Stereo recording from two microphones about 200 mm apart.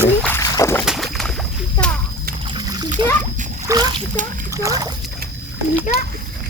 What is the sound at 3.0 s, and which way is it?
A child's voice, 25° right (ahead or behind).